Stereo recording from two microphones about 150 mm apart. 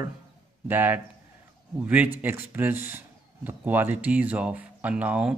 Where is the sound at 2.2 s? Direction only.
10° right (ahead or behind).